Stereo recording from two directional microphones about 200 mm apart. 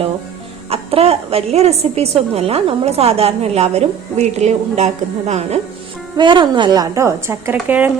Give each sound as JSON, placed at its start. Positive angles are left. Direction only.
{"t": 0.7, "sound": "a woman's voice", "side_deg": -30}